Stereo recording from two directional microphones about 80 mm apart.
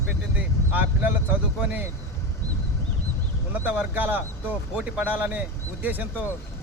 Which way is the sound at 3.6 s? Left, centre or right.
Centre.